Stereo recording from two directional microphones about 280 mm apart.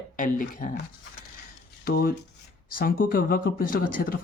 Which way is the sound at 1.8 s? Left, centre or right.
Left.